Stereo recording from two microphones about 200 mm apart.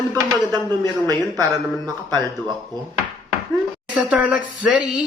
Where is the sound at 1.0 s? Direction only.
20° right (ahead or behind).